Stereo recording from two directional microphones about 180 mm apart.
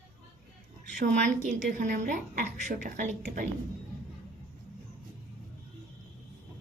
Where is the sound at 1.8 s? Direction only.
45° right (ahead or behind).